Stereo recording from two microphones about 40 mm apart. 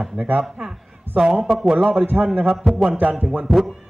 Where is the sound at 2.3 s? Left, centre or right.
Right.